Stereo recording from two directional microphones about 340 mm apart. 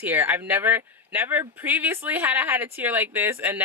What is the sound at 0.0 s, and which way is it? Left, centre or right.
Speech, centre.